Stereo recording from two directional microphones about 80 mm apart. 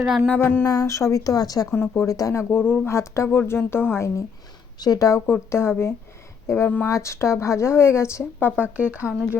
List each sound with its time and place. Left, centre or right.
0.0 s a sound: centre
0.3 s speech: left
1.7 s speech: left
2.0 s speech: left
4.8 s speech: left
5.5 s speech: left
6.8 s speech: left
8.5 s speech: centre